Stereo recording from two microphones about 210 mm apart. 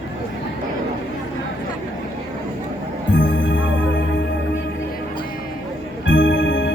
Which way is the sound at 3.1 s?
60° left (ahead or behind).